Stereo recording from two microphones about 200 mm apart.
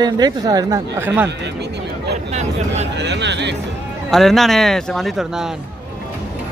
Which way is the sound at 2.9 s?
60° right (ahead or behind).